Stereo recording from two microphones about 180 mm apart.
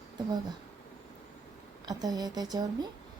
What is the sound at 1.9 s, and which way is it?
Speech, 20° right (ahead or behind).